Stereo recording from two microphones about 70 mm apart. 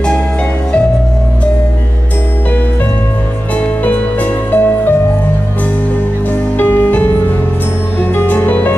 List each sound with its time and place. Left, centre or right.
3.5 s music: left
6.6 s music: left